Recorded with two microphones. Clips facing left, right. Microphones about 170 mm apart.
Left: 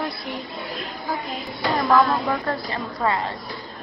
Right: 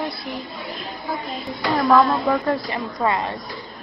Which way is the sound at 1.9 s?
Centre (ahead or behind).